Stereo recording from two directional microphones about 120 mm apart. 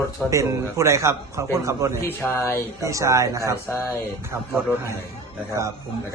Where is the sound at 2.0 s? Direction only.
20° left (ahead or behind).